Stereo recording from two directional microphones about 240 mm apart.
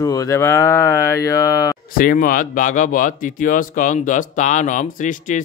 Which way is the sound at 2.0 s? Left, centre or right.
Left.